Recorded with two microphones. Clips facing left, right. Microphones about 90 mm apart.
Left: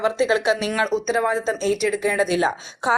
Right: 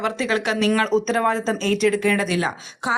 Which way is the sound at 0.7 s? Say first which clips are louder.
Right 2 dB; 10° left (ahead or behind).